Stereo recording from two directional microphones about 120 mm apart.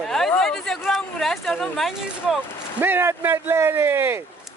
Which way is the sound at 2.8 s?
20° right (ahead or behind).